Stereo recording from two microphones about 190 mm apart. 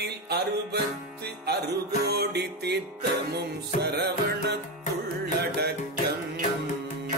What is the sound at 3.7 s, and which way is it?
Music, 40° left (ahead or behind).